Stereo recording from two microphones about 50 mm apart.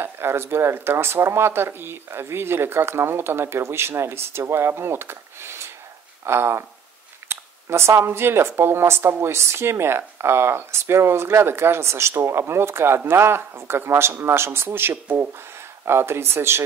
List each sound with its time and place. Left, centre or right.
0.0 s speech: right
15.8 s speech: right